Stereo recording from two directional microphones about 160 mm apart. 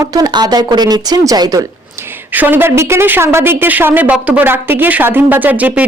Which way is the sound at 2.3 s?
10° right (ahead or behind).